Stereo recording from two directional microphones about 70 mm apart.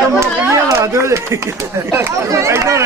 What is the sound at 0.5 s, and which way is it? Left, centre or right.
Speech, right.